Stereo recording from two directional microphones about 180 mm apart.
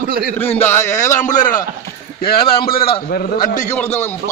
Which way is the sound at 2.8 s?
30° left (ahead or behind).